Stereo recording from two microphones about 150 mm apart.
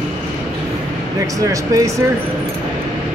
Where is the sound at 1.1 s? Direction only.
20° right (ahead or behind).